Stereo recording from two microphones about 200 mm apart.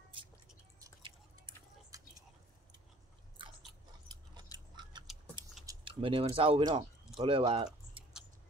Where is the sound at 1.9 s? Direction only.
15° right (ahead or behind).